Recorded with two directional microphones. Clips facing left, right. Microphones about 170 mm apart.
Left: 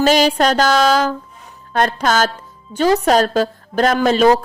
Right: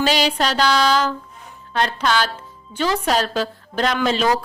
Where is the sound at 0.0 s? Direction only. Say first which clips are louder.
Left 6 dB; 45° left (ahead or behind).